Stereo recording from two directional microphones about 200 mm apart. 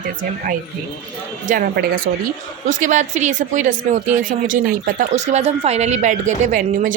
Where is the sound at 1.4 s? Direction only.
45° right (ahead or behind).